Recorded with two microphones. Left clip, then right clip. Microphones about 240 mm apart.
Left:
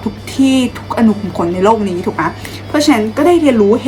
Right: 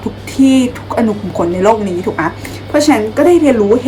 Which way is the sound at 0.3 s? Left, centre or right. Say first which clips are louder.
Right 2 dB; centre.